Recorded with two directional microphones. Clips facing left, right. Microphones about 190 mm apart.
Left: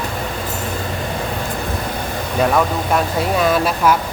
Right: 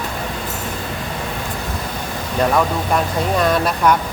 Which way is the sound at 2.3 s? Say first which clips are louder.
Even; 5° left (ahead or behind).